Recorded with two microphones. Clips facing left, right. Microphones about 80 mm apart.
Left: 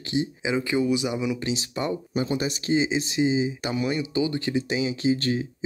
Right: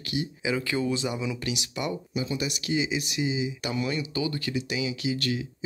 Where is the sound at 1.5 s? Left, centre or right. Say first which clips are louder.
Left 4 dB; left.